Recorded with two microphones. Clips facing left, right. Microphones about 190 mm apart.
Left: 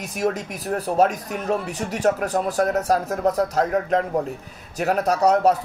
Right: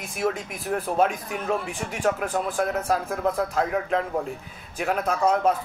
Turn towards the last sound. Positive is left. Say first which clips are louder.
# left 4 dB
turn(degrees=40)  # may be behind; listen again after turning